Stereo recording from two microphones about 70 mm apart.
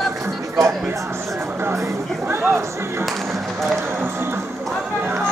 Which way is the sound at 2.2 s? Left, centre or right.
Right.